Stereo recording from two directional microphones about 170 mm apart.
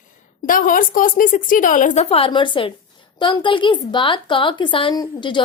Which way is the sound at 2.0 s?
35° left (ahead or behind).